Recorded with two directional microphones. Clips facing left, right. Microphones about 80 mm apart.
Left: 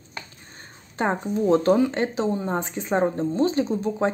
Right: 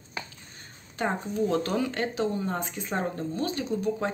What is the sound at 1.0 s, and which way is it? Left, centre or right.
Speech, left.